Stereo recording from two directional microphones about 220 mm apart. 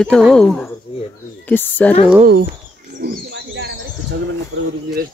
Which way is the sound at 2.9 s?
50° right (ahead or behind).